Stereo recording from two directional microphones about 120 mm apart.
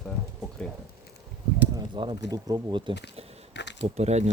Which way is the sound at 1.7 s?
40° right (ahead or behind).